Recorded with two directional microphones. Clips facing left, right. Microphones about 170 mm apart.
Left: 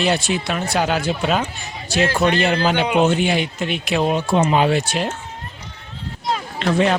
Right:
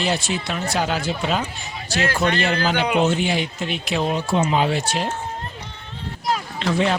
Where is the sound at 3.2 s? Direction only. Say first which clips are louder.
Left 3 dB; 60° left (ahead or behind).